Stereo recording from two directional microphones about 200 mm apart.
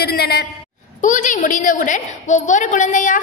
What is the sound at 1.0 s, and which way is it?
A woman's voice, 40° left (ahead or behind).